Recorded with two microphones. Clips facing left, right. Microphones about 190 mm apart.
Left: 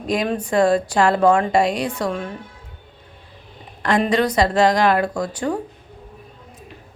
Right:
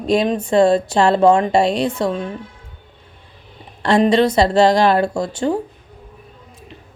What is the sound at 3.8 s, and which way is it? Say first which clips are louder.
A woman's voice: right 4 dB; 30° right (ahead or behind).